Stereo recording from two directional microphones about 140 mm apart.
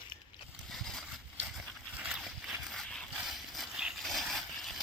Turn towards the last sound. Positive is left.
turn(degrees=0)  # may be behind; listen again after turning